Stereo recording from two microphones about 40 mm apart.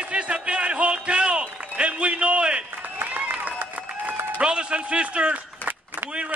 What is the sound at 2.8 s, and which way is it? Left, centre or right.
Run, right.